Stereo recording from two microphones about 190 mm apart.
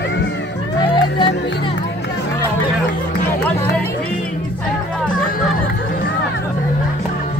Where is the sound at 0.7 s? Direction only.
25° left (ahead or behind).